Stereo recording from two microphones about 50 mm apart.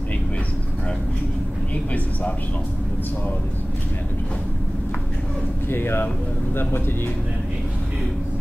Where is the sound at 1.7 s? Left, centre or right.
Left.